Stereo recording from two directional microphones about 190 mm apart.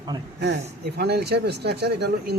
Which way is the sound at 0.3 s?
65° right (ahead or behind).